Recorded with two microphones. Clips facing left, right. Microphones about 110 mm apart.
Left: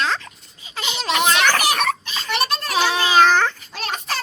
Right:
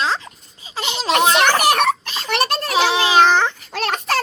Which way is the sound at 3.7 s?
65° right (ahead or behind).